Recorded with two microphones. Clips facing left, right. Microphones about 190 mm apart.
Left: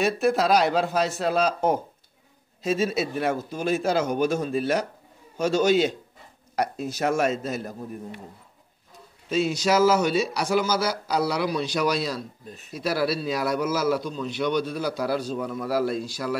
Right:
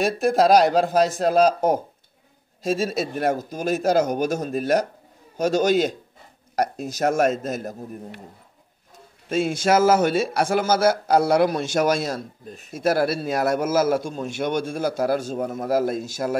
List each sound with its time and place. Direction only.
0.0 s a man's voice: 45° right (ahead or behind)
9.3 s a man's voice: 50° right (ahead or behind)